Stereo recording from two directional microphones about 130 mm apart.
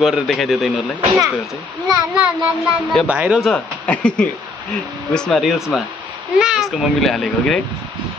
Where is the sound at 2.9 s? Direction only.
Centre (ahead or behind).